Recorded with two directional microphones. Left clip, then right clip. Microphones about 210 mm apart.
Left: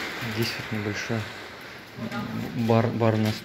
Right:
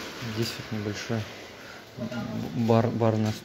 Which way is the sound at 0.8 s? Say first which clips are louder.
Left 2 dB; 10° right (ahead or behind).